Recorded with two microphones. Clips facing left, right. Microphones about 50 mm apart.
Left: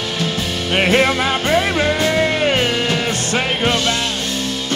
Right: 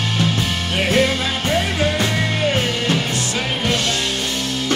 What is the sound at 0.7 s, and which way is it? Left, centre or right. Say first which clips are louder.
Music: left 3 dB; left.